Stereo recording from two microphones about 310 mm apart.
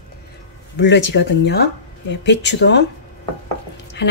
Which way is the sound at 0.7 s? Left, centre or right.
Left.